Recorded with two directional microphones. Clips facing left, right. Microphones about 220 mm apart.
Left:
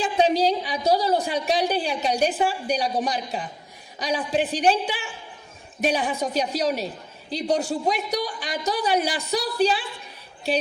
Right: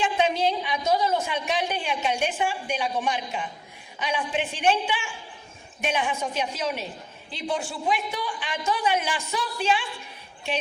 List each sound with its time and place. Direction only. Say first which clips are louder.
0.0 s a man's voice: left 3 dB; 35° left (ahead or behind)